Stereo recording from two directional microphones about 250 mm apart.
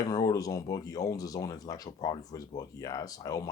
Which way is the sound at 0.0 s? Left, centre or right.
Centre.